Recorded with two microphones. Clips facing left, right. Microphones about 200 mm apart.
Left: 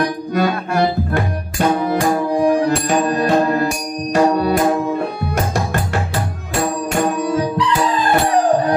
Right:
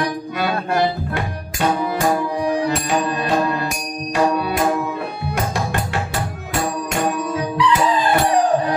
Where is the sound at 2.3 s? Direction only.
50° left (ahead or behind).